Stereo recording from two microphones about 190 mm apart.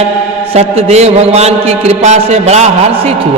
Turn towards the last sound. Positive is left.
turn(degrees=-35)  # may be behind; listen again after turning